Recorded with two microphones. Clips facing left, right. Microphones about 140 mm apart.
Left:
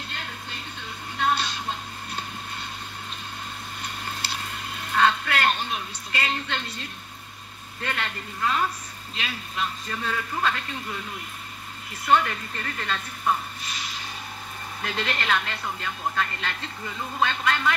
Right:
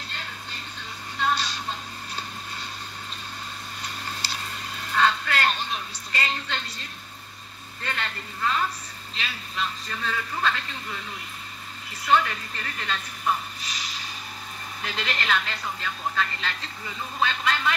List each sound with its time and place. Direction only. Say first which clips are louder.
1.1 s music: left 1 dB; 55° left (ahead or behind)
3.8 s vehicle: left 1 dB; 55° left (ahead or behind)
4.9 s a sound: left 1 dB; 50° left (ahead or behind)
7.8 s a man's voice: left 2 dB; 50° left (ahead or behind)
12.1 s a man's voice: left 1 dB; 45° left (ahead or behind)
13.6 s a sound: left 1 dB; 50° left (ahead or behind)
14.8 s a man's voice: left 2 dB; 45° left (ahead or behind)